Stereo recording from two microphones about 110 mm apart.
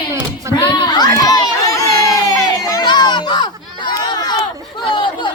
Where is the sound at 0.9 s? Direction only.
35° left (ahead or behind).